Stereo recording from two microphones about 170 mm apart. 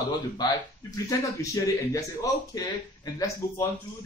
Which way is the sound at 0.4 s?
25° left (ahead or behind).